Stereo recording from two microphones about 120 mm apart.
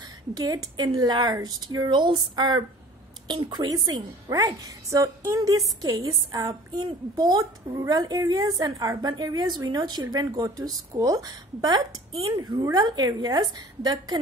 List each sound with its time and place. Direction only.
0.3 s a woman's voice: 35° right (ahead or behind)
12.1 s speech: 50° right (ahead or behind)
12.6 s a woman's voice: 35° right (ahead or behind)